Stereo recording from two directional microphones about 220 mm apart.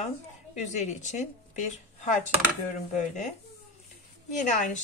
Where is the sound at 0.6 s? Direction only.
30° left (ahead or behind).